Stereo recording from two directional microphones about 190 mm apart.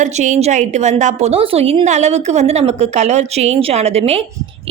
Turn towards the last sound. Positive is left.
turn(degrees=-30)  # may be behind; listen again after turning